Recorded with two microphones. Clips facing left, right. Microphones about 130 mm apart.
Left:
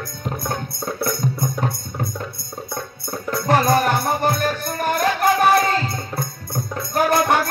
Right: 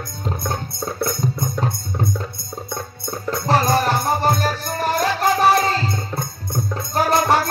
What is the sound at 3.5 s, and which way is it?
Music, 50° left (ahead or behind).